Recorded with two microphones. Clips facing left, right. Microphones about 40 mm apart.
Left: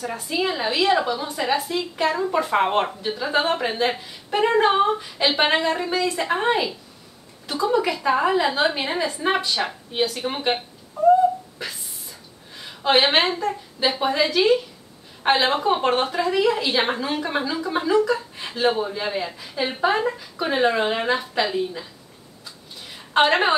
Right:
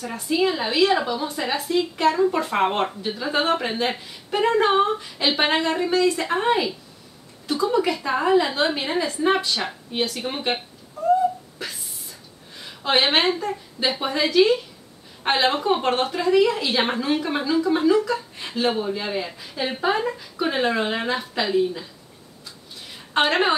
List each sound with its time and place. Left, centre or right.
0.0 s speech: centre
11.6 s wail: centre
12.6 s speech: centre
23.1 s speech: centre